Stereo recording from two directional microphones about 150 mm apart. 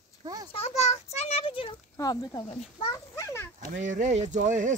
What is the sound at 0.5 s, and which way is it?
A child's voice, 45° left (ahead or behind).